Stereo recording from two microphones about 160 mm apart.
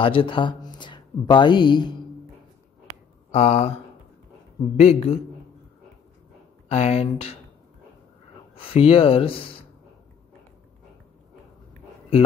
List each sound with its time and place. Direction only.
0.0 s speech: 35° left (ahead or behind)
3.3 s speech: 40° left (ahead or behind)
6.7 s speech: 40° left (ahead or behind)
8.5 s speech: 35° left (ahead or behind)